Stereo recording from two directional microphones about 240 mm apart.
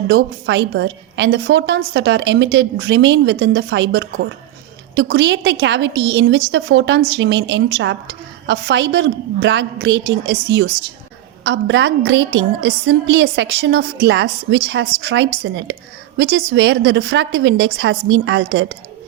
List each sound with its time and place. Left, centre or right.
0.1 s a woman's voice: right